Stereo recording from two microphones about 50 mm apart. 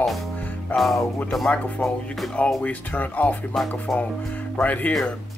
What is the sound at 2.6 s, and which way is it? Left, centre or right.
Speech, left.